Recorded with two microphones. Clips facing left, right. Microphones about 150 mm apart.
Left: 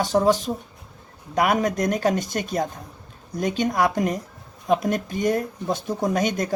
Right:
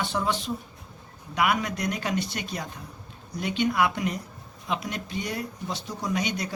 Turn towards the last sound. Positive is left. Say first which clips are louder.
# left 6 dB
turn(degrees=45)  # may be behind; listen again after turning